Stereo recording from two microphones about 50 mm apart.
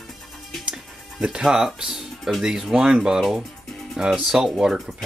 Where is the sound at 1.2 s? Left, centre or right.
Centre.